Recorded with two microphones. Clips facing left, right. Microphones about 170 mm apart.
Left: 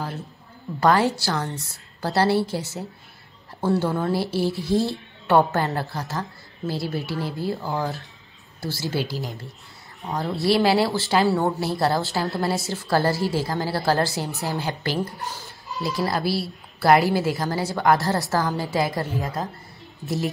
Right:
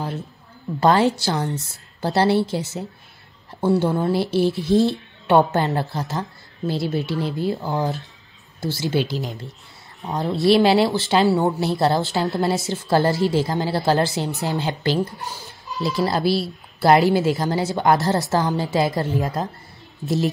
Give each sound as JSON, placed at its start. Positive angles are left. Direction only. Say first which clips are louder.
{"t": 0.7, "sound": "a woman's voice", "louder": "right 2 dB", "side_deg": -25}